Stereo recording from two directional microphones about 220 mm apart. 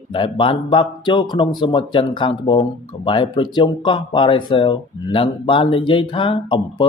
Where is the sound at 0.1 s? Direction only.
20° left (ahead or behind).